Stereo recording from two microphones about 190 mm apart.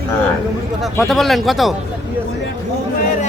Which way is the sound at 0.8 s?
Centre (ahead or behind).